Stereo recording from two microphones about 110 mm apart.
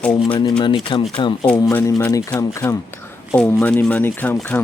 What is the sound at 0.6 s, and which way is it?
Speech, 45° left (ahead or behind).